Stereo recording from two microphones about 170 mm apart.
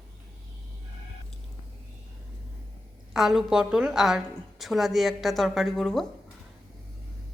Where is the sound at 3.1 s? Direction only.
Centre (ahead or behind).